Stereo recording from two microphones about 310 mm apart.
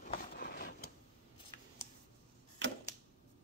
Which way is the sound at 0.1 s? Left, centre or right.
Left.